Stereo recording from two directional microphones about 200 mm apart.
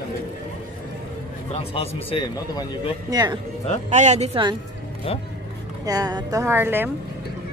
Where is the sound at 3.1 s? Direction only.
20° right (ahead or behind).